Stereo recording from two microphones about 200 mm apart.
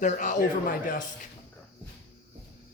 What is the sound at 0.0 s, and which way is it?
Speech, 40° left (ahead or behind).